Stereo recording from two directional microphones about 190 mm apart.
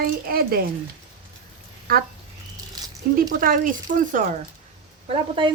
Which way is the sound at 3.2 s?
45° right (ahead or behind).